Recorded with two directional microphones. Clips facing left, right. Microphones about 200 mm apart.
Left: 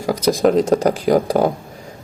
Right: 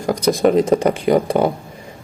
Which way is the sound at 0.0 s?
Centre (ahead or behind).